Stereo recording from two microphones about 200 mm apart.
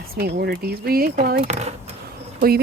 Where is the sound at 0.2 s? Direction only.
55° right (ahead or behind).